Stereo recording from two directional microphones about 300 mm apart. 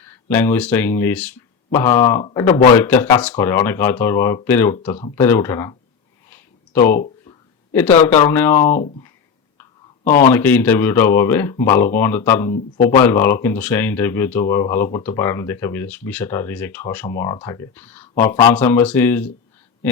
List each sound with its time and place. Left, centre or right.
0.3 s speech: centre
6.7 s speech: centre
10.3 s speech: centre
12.5 s speech: left
13.0 s speech: centre